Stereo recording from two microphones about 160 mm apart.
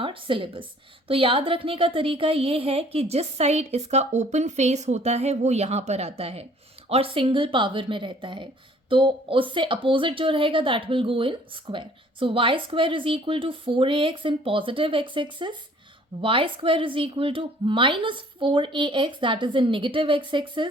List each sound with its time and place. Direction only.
0.0 s a woman's voice: 30° right (ahead or behind)